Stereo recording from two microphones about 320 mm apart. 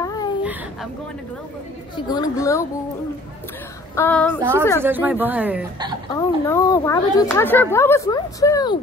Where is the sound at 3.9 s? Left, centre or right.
Centre.